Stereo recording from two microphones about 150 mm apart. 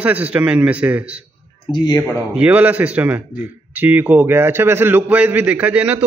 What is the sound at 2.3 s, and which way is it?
A man's voice, 10° right (ahead or behind).